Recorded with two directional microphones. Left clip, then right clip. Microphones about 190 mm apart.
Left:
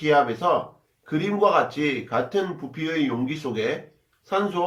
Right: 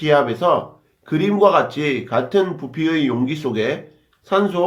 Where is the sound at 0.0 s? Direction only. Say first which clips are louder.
Right 4 dB; 45° right (ahead or behind).